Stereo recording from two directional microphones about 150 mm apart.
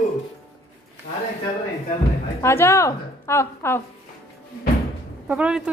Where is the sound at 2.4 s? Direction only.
15° left (ahead or behind).